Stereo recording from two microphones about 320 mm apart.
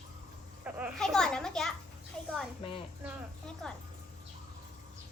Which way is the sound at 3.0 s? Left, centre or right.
Centre.